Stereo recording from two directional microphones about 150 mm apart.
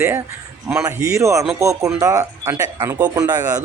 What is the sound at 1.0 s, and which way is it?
Speech, 20° right (ahead or behind).